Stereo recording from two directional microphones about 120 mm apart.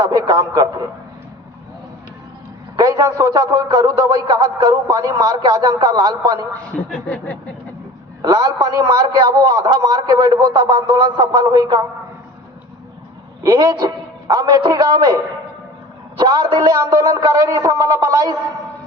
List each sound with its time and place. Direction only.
0.0 s a man's voice: 30° right (ahead or behind)
2.7 s a man's voice: 30° right (ahead or behind)
6.9 s a sound: 10° left (ahead or behind)
8.2 s a man's voice: 35° right (ahead or behind)
13.4 s a man's voice: 30° right (ahead or behind)